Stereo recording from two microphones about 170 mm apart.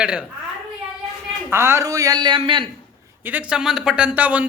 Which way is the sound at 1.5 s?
15° right (ahead or behind).